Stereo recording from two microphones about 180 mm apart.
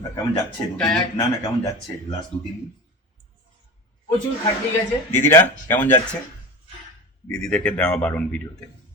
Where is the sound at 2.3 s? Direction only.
35° left (ahead or behind).